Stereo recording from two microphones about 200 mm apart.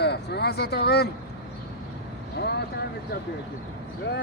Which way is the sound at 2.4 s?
55° left (ahead or behind).